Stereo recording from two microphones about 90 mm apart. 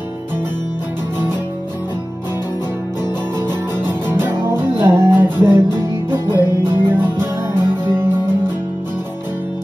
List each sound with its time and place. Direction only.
3.4 s music: 25° right (ahead or behind)